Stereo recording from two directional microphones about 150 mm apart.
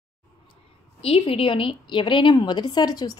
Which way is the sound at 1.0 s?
40° left (ahead or behind).